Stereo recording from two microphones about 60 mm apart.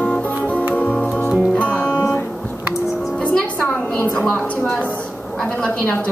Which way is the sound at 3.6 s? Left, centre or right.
Left.